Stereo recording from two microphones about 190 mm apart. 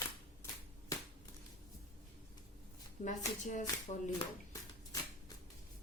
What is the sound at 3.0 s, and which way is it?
Speech, 40° left (ahead or behind).